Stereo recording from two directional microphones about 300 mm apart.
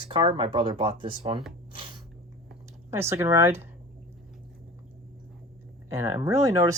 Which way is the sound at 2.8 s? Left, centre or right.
Centre.